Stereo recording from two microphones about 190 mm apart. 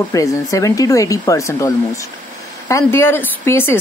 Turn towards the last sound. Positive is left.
turn(degrees=10)  # may be behind; listen again after turning